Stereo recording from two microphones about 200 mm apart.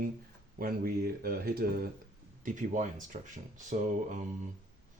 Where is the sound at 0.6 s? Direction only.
45° right (ahead or behind).